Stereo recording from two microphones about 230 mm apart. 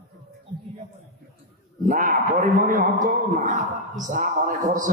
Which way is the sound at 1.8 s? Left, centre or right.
Right.